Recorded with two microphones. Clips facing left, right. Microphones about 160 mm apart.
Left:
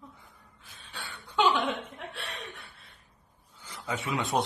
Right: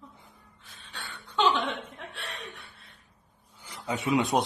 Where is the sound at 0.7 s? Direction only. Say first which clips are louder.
Even; centre (ahead or behind).